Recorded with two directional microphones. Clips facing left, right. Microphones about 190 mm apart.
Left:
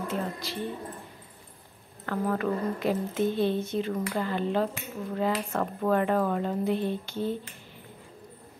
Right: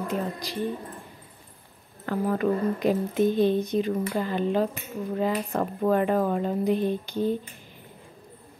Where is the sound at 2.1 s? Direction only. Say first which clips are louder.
Right 3 dB; 20° right (ahead or behind).